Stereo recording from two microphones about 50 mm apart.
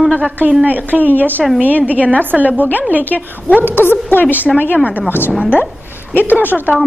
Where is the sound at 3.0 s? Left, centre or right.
Left.